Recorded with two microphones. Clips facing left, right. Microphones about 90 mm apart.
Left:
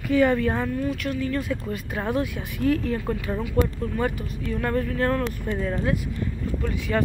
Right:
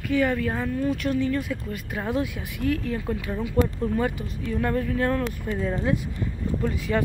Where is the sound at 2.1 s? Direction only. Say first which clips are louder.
Even; 15° right (ahead or behind).